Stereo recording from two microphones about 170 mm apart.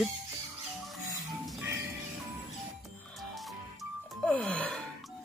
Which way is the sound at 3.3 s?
5° left (ahead or behind).